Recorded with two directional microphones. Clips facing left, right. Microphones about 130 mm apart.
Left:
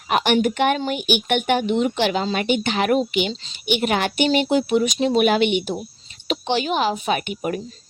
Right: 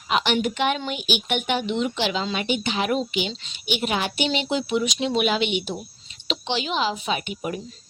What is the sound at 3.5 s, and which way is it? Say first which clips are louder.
Speech: left 4 dB; 55° left (ahead or behind).